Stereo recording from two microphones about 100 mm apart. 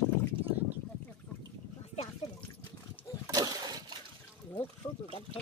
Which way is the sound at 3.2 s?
40° right (ahead or behind).